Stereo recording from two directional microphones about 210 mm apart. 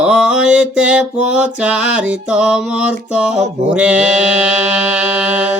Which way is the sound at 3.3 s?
30° right (ahead or behind).